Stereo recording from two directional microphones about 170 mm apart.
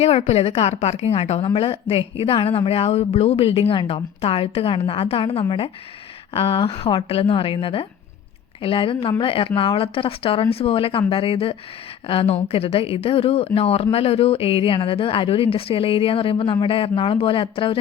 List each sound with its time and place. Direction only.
0.0 s a woman's voice: 40° left (ahead or behind)